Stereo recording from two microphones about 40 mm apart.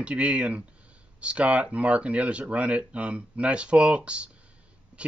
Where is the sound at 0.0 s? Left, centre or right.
Right.